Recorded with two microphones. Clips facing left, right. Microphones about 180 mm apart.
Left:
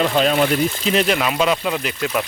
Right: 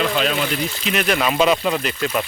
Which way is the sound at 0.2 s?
40° left (ahead or behind).